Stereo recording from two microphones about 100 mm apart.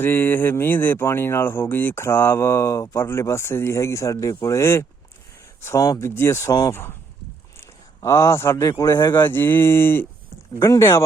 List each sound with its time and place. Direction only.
0.0 s speech: 20° left (ahead or behind)
8.0 s speech: 30° left (ahead or behind)